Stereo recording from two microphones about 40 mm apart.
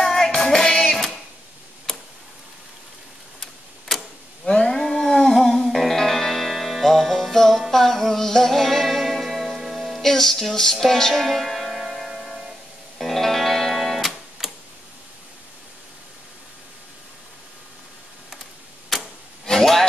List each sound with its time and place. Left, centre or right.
0.0 s music: centre
1.9 s tick-tock: centre
3.9 s arrow: centre
4.5 s a sound: left
4.7 s a sound: centre
5.2 s music: centre
10.0 s music: centre
13.0 s music: centre
18.9 s clock: centre
19.4 s a sound: centre